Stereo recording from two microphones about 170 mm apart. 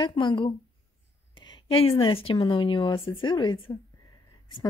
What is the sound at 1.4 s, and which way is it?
A woman's voice, 30° left (ahead or behind).